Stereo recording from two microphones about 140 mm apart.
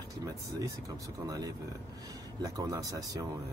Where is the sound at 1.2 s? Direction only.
25° right (ahead or behind).